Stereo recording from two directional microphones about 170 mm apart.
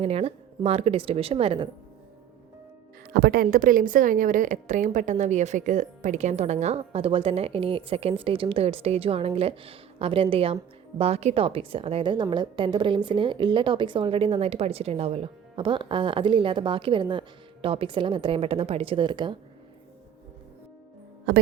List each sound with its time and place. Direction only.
0.0 s a woman's voice: 35° right (ahead or behind)
3.1 s a woman's voice: 70° right (ahead or behind); by 19.4 s 30° right (ahead or behind)
21.3 s speech: 75° right (ahead or behind)